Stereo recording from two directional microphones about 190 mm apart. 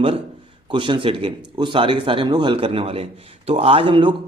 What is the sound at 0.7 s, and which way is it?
A man's voice, 25° right (ahead or behind).